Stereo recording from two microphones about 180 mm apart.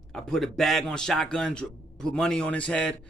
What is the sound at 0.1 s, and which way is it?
A man's voice, 5° left (ahead or behind).